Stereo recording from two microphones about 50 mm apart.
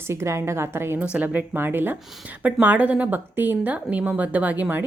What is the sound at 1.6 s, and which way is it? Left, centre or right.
Speech, right.